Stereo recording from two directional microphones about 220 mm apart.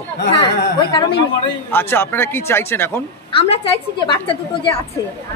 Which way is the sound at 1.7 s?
10° left (ahead or behind).